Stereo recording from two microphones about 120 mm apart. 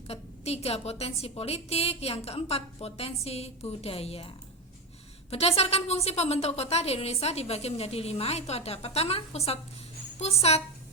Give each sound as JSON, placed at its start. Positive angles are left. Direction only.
{"t": 0.1, "sound": "a woman's voice", "side_deg": 60}
{"t": 5.3, "sound": "a woman's voice", "side_deg": 60}